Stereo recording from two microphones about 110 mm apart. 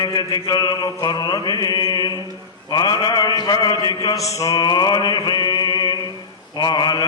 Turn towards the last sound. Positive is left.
turn(degrees=45)  # may be behind; listen again after turning